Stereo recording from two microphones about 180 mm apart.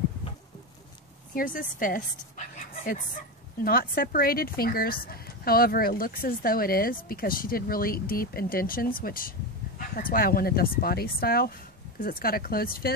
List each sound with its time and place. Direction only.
1.3 s a woman's voice: 50° left (ahead or behind)